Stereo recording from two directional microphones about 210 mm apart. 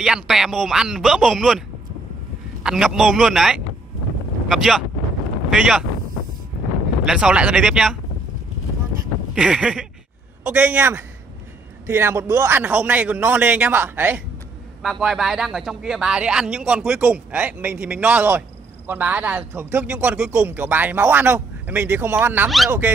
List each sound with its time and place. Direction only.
0.0 s speech: centre (ahead or behind)
2.6 s speech: centre (ahead or behind)
7.1 s speech: 5° right (ahead or behind)
9.3 s speech: 5° right (ahead or behind)